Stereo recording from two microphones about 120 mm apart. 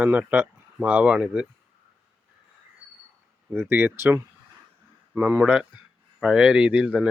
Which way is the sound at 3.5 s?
15° right (ahead or behind).